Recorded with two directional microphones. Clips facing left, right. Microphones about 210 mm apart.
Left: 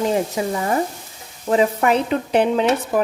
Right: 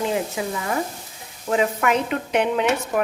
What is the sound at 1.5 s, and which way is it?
Speech, 35° left (ahead or behind).